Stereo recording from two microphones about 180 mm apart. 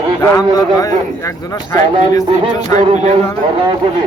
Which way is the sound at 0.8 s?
20° left (ahead or behind).